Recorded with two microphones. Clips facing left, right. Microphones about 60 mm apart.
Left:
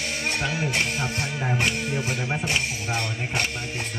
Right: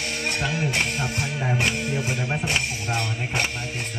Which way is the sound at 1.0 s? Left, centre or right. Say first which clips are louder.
Right 1 dB; centre.